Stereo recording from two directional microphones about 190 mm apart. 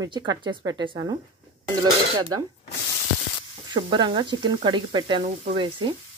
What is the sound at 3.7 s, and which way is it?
Speech, 25° right (ahead or behind).